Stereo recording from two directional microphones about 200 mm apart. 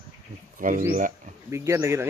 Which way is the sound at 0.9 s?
40° right (ahead or behind).